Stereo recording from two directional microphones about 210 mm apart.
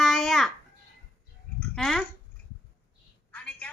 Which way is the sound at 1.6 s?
5° left (ahead or behind).